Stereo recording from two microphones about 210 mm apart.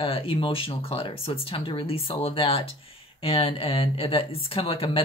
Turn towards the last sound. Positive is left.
turn(degrees=25)  # may be behind; listen again after turning